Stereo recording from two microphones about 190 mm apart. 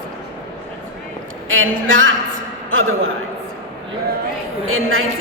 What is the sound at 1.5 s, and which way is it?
A woman's voice, 90° right.